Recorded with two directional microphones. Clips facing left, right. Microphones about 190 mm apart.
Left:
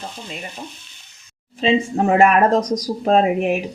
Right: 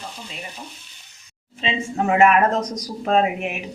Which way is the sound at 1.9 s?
35° left (ahead or behind).